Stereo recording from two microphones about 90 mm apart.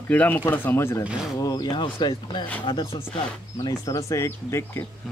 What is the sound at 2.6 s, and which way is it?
Speech, 80° left.